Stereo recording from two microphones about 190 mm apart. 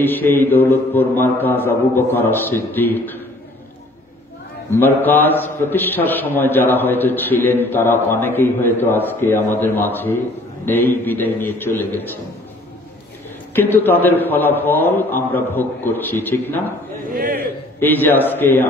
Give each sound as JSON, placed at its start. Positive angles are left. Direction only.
{"t": 0.0, "sound": "a man's voice", "side_deg": 10}
{"t": 4.7, "sound": "a man's voice", "side_deg": 10}
{"t": 13.6, "sound": "a man's voice", "side_deg": 10}
{"t": 17.1, "sound": "a man's voice", "side_deg": -50}
{"t": 17.7, "sound": "a man's voice", "side_deg": 10}